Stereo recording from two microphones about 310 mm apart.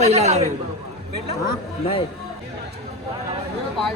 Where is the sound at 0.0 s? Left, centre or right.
Right.